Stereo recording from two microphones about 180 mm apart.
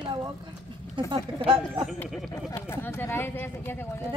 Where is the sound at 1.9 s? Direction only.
Centre (ahead or behind).